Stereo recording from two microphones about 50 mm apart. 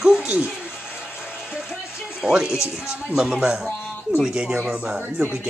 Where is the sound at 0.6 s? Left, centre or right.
Left.